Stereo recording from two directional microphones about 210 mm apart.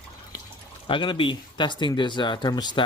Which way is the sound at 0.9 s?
25° left (ahead or behind).